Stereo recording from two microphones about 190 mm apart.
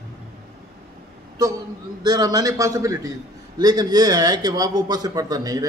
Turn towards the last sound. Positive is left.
turn(degrees=-20)  # may be behind; listen again after turning